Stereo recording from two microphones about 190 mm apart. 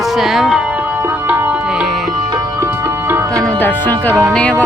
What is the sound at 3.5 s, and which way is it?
Music, 10° left (ahead or behind).